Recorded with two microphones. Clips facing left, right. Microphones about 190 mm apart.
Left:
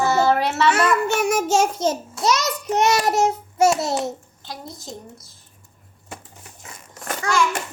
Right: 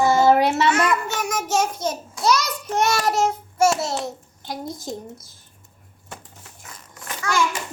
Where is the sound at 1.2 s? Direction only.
30° left (ahead or behind).